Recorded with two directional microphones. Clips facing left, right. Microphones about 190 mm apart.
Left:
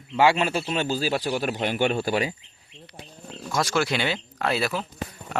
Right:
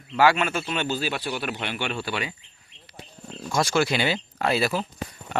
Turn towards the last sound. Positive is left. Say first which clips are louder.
# right 1 dB
turn(degrees=0)  # may be behind; listen again after turning